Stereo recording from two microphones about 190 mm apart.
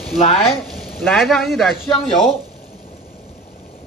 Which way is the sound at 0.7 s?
Centre (ahead or behind).